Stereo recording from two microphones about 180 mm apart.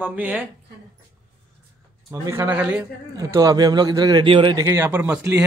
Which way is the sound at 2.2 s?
10° right (ahead or behind).